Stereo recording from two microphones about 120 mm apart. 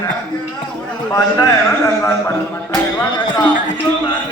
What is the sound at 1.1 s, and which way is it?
Speech, 25° left (ahead or behind).